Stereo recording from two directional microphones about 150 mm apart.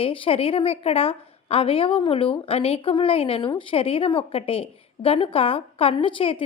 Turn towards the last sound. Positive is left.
turn(degrees=35)  # may be behind; listen again after turning